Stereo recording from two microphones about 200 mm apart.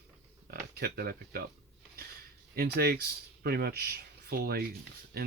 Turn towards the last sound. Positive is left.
turn(degrees=-50)  # may be behind; listen again after turning